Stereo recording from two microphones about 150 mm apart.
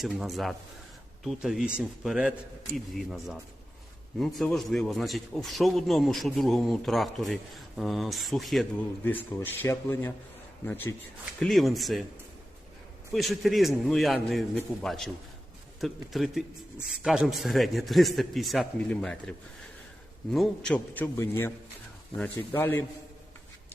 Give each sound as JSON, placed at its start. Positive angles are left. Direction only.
{"t": 0.0, "sound": "a man's voice", "side_deg": 0}
{"t": 9.0, "sound": "a man's voice", "side_deg": 15}
{"t": 11.3, "sound": "a man's voice", "side_deg": 0}
{"t": 13.1, "sound": "a man's voice", "side_deg": 0}
{"t": 20.3, "sound": "a man's voice", "side_deg": 0}